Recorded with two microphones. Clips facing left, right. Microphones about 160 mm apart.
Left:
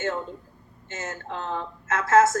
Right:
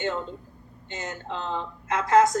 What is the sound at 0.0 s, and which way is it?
A woman's voice, 20° right (ahead or behind).